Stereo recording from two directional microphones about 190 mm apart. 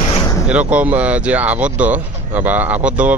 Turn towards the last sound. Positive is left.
turn(degrees=-5)  # may be behind; listen again after turning